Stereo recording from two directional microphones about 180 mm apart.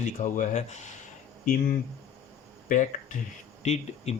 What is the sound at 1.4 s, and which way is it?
Speech, 50° left (ahead or behind).